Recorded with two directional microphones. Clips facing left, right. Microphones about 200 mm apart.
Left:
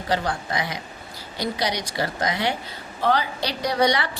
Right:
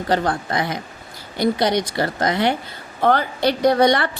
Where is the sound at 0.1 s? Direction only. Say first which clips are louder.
Right 4 dB; 55° right (ahead or behind).